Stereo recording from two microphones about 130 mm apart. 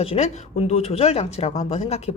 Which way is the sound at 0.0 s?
50° left (ahead or behind).